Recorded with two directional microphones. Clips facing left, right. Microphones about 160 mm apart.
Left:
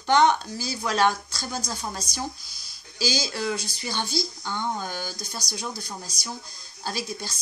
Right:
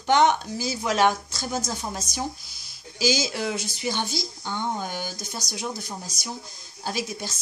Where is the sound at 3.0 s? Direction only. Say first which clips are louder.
Right 3 dB; 20° right (ahead or behind).